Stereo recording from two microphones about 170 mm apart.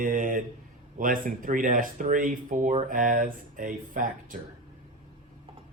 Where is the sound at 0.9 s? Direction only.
55° right (ahead or behind).